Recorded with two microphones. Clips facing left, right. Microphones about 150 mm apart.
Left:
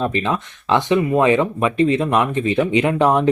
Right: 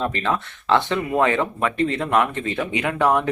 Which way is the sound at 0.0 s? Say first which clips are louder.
Left 3 dB; 20° left (ahead or behind).